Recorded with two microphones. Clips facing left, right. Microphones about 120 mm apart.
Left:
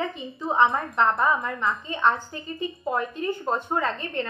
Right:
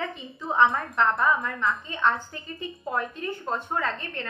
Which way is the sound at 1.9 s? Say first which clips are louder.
Left 2 dB; 20° left (ahead or behind).